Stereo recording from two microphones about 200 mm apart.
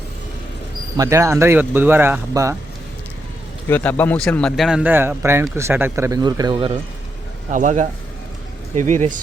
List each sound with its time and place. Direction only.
0.9 s speech: 15° right (ahead or behind)
3.7 s speech: 10° left (ahead or behind); by 6.7 s 25° right (ahead or behind)
7.5 s speech: 40° right (ahead or behind)